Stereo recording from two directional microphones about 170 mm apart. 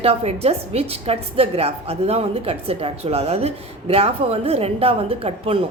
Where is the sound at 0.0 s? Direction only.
35° right (ahead or behind).